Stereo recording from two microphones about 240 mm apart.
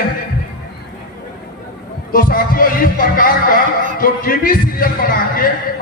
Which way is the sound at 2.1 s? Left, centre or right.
Left.